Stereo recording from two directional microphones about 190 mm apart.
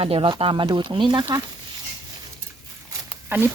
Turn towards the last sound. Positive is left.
turn(degrees=-10)  # may be behind; listen again after turning